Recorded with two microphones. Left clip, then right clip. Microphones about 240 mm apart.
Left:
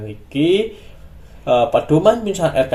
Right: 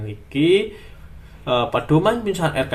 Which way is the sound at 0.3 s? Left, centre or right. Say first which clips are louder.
Left 1 dB; centre.